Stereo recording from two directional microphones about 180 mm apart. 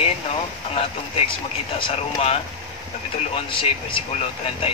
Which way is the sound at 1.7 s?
30° left (ahead or behind).